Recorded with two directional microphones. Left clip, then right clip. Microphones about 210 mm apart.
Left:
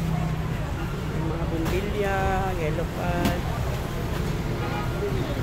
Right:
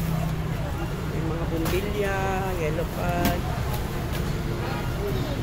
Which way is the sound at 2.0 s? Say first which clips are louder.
Left 3 dB; 5° left (ahead or behind).